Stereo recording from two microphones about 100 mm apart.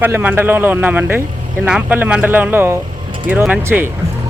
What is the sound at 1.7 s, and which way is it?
Speech, 10° right (ahead or behind).